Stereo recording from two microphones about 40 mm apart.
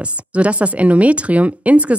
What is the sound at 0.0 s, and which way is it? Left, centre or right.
Speech, right.